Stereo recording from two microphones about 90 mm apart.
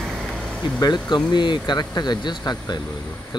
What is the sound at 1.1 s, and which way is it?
Speech, 55° left (ahead or behind).